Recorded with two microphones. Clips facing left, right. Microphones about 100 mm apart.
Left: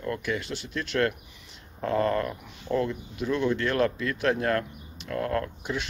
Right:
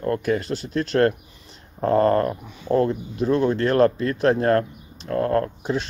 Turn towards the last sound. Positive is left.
turn(degrees=-35)  # may be behind; listen again after turning